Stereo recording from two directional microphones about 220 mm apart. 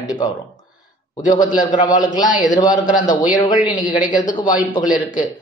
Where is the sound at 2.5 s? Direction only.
15° left (ahead or behind).